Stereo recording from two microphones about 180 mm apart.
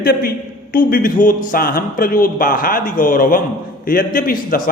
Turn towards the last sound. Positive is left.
turn(degrees=50)  # may be behind; listen again after turning